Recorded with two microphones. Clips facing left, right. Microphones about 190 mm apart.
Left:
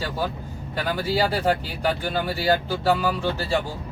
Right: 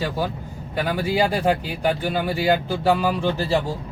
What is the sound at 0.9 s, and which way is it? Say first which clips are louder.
Speech: right 2 dB; 15° right (ahead or behind).